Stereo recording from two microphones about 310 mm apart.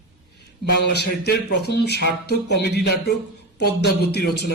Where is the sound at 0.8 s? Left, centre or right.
Left.